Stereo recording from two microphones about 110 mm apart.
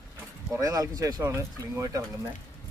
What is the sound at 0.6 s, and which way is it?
Speech, 30° right (ahead or behind).